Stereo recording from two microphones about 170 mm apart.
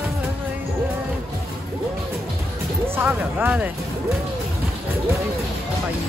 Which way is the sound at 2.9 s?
10° right (ahead or behind).